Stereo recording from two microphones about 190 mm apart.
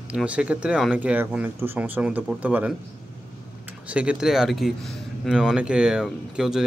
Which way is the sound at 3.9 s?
5° right (ahead or behind).